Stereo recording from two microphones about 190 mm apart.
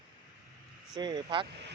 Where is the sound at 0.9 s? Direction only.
20° right (ahead or behind).